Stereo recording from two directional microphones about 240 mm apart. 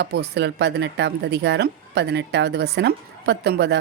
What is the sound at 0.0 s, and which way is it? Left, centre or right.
Speech, right.